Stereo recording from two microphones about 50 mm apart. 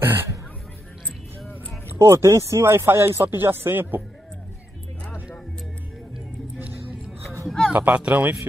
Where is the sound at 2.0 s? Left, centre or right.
Right.